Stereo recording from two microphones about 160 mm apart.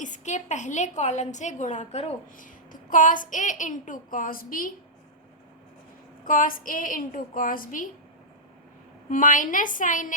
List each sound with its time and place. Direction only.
0.0 s a woman's voice: 50° left (ahead or behind)
2.9 s a woman's voice: 55° left (ahead or behind)
6.2 s a woman's voice: 60° left (ahead or behind)
9.0 s a woman's voice: 55° left (ahead or behind)